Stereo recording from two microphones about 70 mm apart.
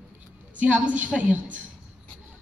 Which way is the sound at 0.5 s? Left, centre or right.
Right.